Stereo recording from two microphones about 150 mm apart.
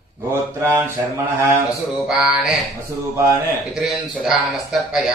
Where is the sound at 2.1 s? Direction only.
5° right (ahead or behind).